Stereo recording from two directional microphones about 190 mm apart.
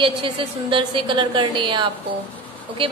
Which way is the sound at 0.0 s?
25° right (ahead or behind).